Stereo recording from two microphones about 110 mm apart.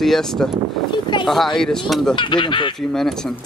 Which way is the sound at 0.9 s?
45° left (ahead or behind).